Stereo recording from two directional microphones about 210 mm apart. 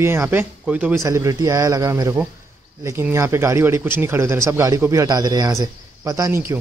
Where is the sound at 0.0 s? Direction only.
10° right (ahead or behind).